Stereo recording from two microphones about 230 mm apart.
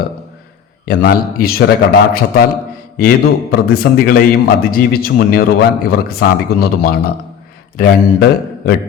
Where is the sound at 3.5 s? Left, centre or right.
Left.